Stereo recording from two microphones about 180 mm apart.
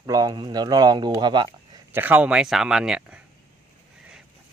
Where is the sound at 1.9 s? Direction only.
10° right (ahead or behind).